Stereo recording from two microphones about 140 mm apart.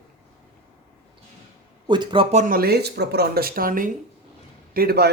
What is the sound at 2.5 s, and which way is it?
A man's voice, 90° right.